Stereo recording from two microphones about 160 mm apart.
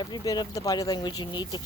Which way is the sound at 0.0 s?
25° left (ahead or behind).